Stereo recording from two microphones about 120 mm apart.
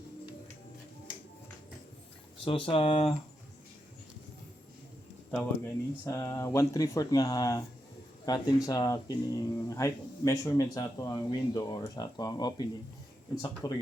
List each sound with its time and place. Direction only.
2.4 s speech: 45° left (ahead or behind)
5.6 s speech: 25° left (ahead or behind)